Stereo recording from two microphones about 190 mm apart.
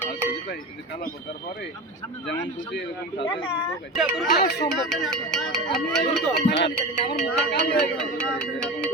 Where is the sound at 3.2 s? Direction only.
25° left (ahead or behind).